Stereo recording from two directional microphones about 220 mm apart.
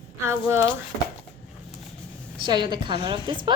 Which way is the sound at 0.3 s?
10° right (ahead or behind).